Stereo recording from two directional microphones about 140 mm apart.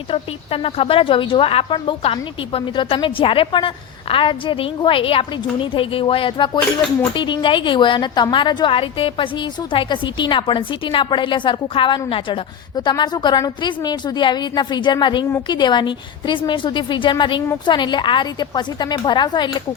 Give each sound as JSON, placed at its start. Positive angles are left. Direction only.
{"t": 0.1, "sound": "a woman's voice", "side_deg": 40}